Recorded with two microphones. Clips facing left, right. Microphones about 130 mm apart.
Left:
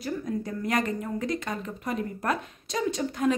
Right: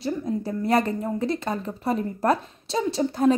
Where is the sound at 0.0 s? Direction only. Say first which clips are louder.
Right 4 dB; 30° right (ahead or behind).